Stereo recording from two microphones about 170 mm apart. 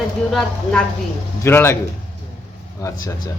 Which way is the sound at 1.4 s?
15° left (ahead or behind).